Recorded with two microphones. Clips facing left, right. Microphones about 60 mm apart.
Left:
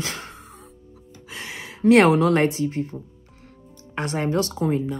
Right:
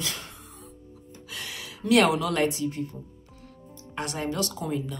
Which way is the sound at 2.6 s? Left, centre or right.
Left.